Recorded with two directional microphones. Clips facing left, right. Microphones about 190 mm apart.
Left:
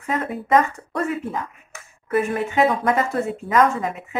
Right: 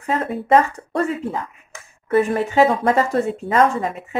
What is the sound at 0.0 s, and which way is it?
A woman's voice, 30° right (ahead or behind).